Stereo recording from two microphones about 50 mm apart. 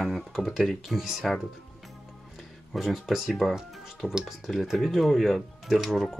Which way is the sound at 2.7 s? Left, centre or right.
Centre.